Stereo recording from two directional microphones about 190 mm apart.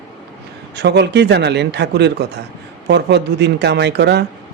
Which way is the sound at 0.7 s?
65° right (ahead or behind).